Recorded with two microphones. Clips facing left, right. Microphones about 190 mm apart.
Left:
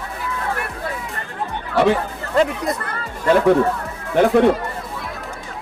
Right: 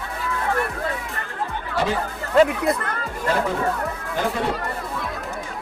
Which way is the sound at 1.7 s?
65° left (ahead or behind).